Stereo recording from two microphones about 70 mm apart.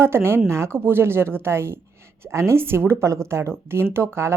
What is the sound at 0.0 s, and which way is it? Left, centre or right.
Speech, right.